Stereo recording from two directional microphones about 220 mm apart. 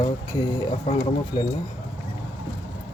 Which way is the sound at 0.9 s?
35° left (ahead or behind).